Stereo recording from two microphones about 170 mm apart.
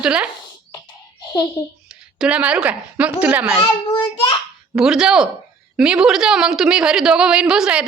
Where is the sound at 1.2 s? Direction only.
25° left (ahead or behind).